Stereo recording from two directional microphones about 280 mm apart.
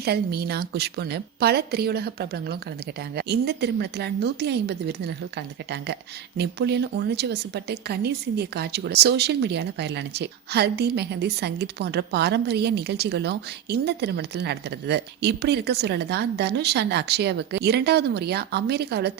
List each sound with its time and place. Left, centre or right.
0.0 s speech: right